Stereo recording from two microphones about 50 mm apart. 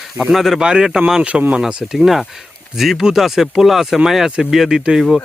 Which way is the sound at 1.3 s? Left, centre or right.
Right.